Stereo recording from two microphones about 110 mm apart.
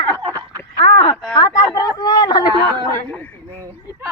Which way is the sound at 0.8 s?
85° left.